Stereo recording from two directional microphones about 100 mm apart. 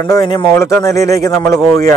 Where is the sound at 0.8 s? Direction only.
35° left (ahead or behind).